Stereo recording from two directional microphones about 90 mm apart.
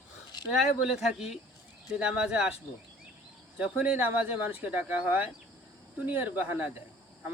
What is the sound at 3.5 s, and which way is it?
Speech, 15° right (ahead or behind).